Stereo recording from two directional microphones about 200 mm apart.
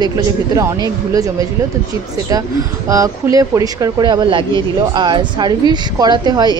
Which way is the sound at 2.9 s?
15° right (ahead or behind).